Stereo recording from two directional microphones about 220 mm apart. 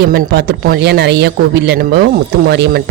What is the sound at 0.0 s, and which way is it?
Speech, 45° right (ahead or behind).